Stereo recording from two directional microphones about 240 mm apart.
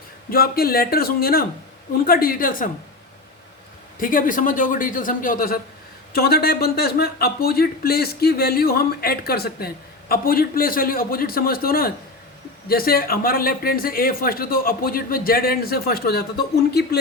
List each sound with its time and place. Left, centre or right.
0.3 s speech: left
4.0 s speech: left